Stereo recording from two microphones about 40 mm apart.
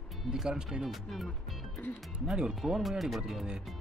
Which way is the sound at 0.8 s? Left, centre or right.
Centre.